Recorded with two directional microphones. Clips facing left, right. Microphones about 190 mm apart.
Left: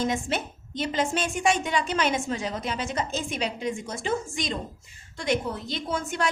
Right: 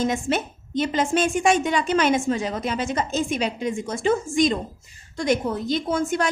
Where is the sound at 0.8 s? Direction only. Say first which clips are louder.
Right 5 dB; 50° right (ahead or behind).